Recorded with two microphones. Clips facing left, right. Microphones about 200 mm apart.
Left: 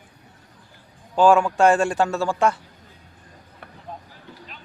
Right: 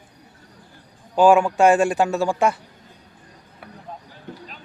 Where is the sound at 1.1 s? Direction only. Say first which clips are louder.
Right 1 dB; 10° right (ahead or behind).